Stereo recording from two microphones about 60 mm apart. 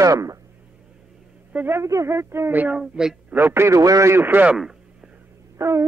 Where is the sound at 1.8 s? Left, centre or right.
Right.